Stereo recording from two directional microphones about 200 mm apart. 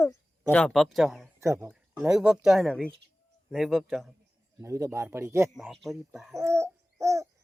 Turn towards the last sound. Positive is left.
turn(degrees=-15)  # may be behind; listen again after turning